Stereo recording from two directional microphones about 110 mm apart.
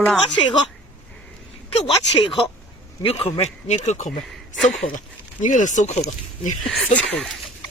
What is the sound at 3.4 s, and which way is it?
Speech, 90° left.